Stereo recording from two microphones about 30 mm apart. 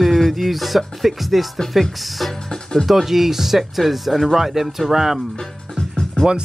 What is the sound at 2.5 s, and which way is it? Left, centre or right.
Speech, centre.